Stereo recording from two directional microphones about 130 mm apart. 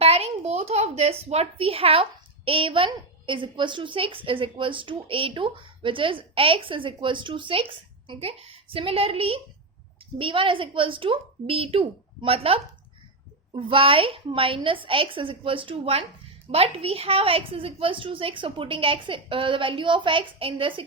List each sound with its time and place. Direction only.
0.0 s speech: 50° right (ahead or behind)